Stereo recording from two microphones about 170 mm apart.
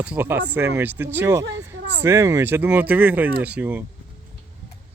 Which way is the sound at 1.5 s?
90° right.